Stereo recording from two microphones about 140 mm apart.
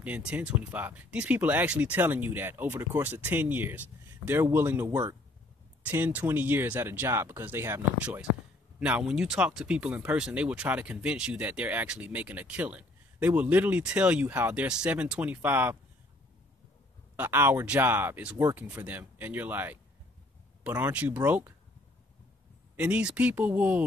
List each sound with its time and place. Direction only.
0.0 s speech: 10° right (ahead or behind)
17.2 s speech: 15° right (ahead or behind)
22.8 s speech: 10° right (ahead or behind)